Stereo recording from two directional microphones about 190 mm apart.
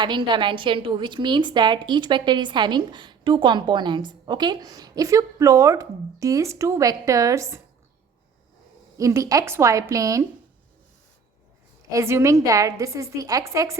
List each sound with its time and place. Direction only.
0.0 s a woman's voice: 25° right (ahead or behind)
9.0 s a woman's voice: 15° right (ahead or behind)
11.9 s a woman's voice: 15° right (ahead or behind)